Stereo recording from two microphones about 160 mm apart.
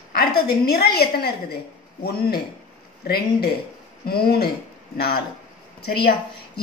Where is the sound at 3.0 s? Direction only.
90° left.